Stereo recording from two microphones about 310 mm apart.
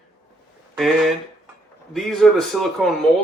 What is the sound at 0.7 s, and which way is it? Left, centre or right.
Speech, centre.